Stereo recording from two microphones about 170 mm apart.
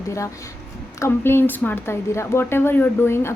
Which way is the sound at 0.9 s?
15° left (ahead or behind).